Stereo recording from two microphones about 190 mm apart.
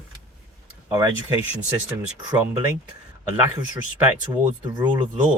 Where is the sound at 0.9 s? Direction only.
15° right (ahead or behind).